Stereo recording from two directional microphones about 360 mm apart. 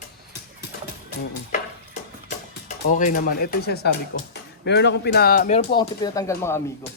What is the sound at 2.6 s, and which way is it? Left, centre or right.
Speech, left.